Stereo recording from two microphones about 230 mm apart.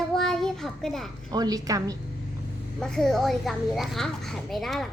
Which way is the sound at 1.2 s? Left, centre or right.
Centre.